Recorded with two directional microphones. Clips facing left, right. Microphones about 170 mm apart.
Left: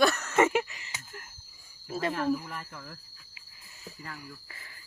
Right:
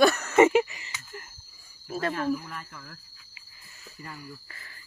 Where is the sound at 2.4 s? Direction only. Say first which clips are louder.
Even; 10° left (ahead or behind).